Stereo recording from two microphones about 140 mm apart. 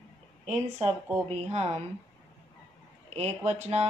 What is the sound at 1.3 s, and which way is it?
Speech, 50° right (ahead or behind).